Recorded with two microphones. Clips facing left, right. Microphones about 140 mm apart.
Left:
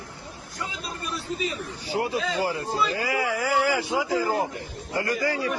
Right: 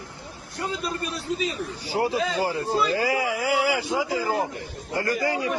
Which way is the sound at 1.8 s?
30° right (ahead or behind).